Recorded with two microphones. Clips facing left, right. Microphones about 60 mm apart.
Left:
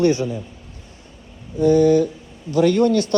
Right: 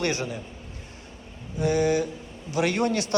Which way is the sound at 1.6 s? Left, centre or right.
Right.